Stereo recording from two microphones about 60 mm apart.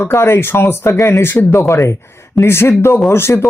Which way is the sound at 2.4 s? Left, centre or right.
Left.